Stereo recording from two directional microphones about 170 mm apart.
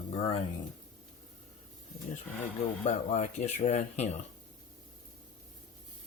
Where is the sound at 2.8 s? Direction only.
40° left (ahead or behind).